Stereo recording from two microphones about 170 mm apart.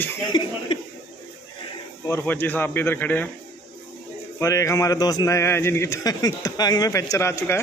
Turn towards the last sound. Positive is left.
turn(degrees=15)  # may be behind; listen again after turning